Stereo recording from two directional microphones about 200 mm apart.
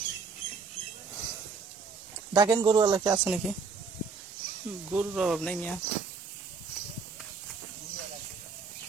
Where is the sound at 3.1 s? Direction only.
5° right (ahead or behind).